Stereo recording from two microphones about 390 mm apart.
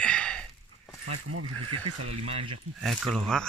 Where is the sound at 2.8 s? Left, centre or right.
Centre.